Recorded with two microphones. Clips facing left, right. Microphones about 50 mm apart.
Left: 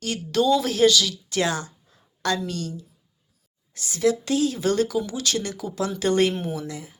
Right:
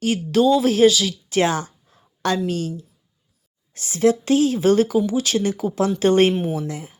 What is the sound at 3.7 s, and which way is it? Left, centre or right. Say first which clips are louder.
Speech: right 4 dB; right.